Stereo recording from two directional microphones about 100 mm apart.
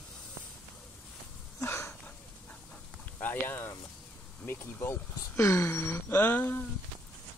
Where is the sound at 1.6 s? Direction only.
25° left (ahead or behind).